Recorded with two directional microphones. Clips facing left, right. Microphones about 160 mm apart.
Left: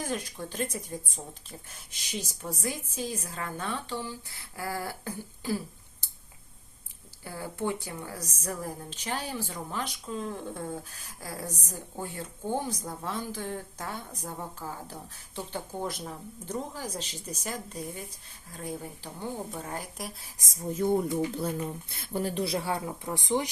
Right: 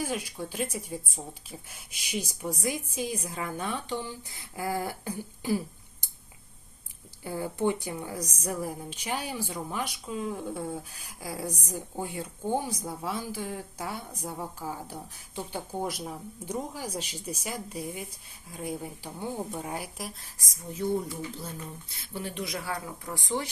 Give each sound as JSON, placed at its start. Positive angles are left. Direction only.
{"t": 0.0, "sound": "a woman's voice", "side_deg": -10}
{"t": 7.3, "sound": "a woman's voice", "side_deg": -20}
{"t": 20.0, "sound": "speech", "side_deg": 0}
{"t": 20.4, "sound": "speech", "side_deg": 25}
{"t": 20.7, "sound": "speech", "side_deg": 50}